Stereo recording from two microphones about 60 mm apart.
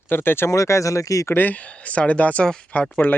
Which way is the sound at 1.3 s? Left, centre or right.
Left.